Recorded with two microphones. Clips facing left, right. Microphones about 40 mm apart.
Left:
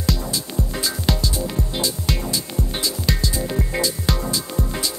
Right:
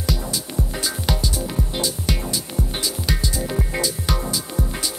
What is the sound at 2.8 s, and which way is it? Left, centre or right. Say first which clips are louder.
Music: left 2 dB; centre.